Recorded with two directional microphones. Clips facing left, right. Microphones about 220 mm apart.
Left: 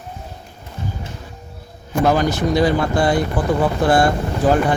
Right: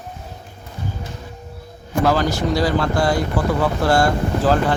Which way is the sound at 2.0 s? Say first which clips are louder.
Left 2 dB; 20° left (ahead or behind).